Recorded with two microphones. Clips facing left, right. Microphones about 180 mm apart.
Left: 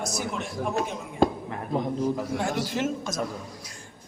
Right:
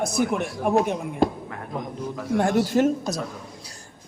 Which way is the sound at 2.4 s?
45° right (ahead or behind).